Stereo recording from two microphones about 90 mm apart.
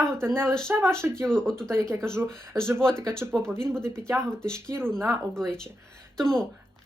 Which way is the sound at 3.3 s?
10° left (ahead or behind).